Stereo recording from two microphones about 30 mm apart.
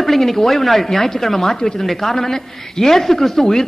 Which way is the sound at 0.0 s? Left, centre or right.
Centre.